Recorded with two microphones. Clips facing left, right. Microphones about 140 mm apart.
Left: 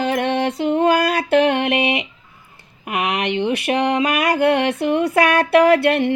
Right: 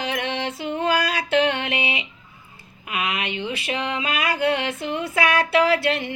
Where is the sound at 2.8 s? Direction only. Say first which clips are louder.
Left 6 dB; 75° left (ahead or behind); by 6.2 s 55° left (ahead or behind).